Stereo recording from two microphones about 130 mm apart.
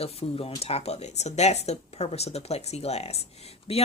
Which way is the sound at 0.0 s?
50° left (ahead or behind).